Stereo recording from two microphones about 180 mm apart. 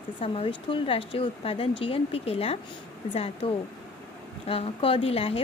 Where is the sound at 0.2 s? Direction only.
30° left (ahead or behind).